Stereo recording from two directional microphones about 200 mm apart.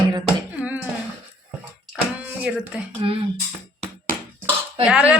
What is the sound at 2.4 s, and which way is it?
Speech, 5° right (ahead or behind).